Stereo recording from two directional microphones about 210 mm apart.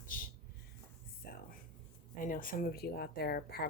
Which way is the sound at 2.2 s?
40° left (ahead or behind).